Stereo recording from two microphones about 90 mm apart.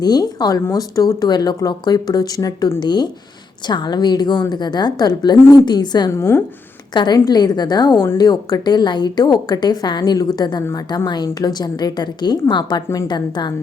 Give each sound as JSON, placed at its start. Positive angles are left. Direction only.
{"t": 0.0, "sound": "speech", "side_deg": 50}
{"t": 6.1, "sound": "speech", "side_deg": 30}
{"t": 6.9, "sound": "a woman's voice", "side_deg": 50}